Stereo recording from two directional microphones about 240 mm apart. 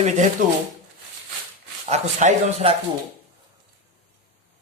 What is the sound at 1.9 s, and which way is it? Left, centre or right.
Speech, right.